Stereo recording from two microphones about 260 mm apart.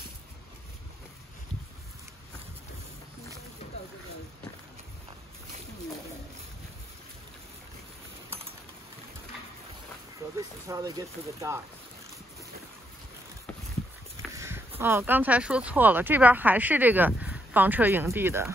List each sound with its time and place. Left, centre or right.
10.3 s speech: centre
14.3 s a sound: centre
14.8 s speech: centre